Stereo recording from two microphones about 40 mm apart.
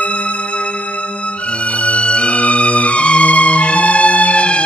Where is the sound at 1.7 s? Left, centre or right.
Left.